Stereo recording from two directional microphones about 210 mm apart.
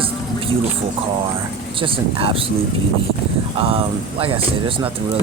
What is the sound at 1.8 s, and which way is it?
Speech, 25° right (ahead or behind).